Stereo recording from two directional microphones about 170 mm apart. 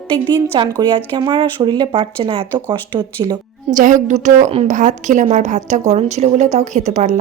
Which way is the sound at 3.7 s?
50° right (ahead or behind).